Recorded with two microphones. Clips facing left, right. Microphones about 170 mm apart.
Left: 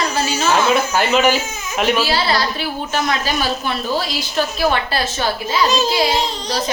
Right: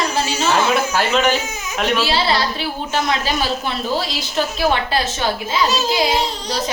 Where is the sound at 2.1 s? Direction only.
25° right (ahead or behind).